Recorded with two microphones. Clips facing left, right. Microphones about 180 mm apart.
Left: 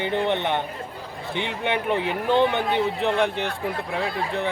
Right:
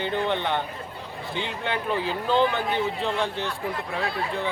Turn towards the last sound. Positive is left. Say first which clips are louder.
# left 2 dB
turn(degrees=20)  # may be behind; listen again after turning